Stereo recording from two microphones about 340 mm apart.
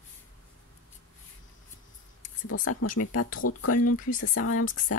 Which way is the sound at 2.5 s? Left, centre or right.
Left.